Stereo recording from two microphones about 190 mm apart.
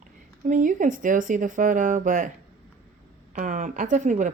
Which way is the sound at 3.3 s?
40° right (ahead or behind).